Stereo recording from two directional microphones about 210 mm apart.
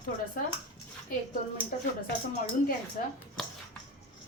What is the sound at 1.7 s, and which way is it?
Speech, 40° left (ahead or behind).